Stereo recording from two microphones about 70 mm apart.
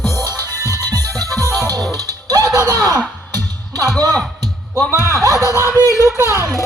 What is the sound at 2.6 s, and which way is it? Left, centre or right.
Speech, left.